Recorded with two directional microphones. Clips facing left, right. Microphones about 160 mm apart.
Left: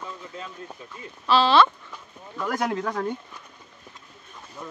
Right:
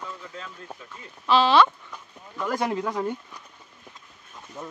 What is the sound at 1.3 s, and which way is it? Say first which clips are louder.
Speech: even; 15° right (ahead or behind).